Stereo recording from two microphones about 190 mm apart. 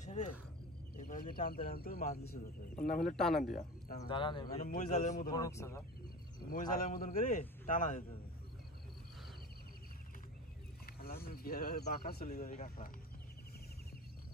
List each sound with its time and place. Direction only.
0.0 s a sound: 40° left (ahead or behind)
0.9 s speech: 45° left (ahead or behind)
3.2 s speech: centre (ahead or behind)
4.1 s speech: 25° left (ahead or behind)
4.6 s speech: 45° left (ahead or behind)
5.3 s speech: 15° left (ahead or behind)
6.7 s speech: 45° left (ahead or behind)
10.9 s vehicle: 50° left (ahead or behind)
11.2 s speech: 50° left (ahead or behind)